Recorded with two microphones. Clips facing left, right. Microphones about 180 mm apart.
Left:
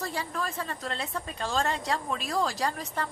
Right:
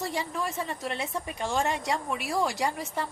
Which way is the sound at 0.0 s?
15° right (ahead or behind).